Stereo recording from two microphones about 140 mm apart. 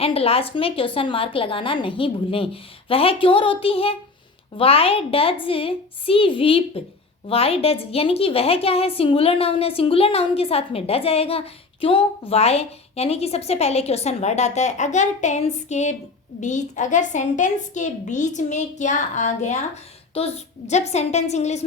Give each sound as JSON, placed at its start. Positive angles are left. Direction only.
{"t": 0.0, "sound": "a woman's voice", "side_deg": 45}